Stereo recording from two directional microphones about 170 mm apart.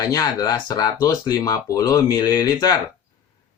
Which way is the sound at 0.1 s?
20° left (ahead or behind).